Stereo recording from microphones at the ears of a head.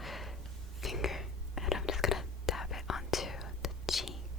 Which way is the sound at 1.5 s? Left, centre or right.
Left.